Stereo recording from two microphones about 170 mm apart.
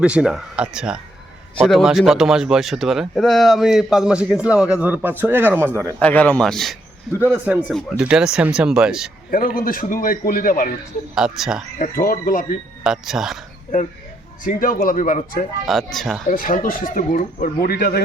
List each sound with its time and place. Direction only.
0.0 s speech: 5° right (ahead or behind)
6.0 s a man's voice: 10° left (ahead or behind)
7.4 s speech: 10° right (ahead or behind)
9.3 s speech: 55° left (ahead or behind)
11.1 s speech: 5° right (ahead or behind)
11.8 s speech: 50° left (ahead or behind)
12.8 s speech: centre (ahead or behind)
14.4 s speech: 55° left (ahead or behind)
15.9 s speech: centre (ahead or behind)
16.3 s speech: 55° left (ahead or behind)